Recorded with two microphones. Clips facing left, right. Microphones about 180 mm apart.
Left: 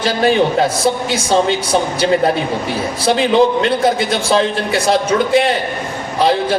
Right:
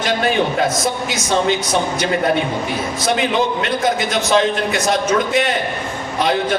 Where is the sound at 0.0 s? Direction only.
30° left (ahead or behind).